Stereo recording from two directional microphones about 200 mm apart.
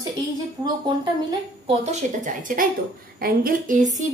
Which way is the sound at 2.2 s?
40° right (ahead or behind).